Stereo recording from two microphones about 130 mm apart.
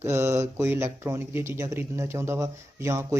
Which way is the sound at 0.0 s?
20° right (ahead or behind).